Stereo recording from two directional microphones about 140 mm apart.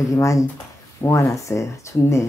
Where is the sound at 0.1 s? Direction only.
25° left (ahead or behind).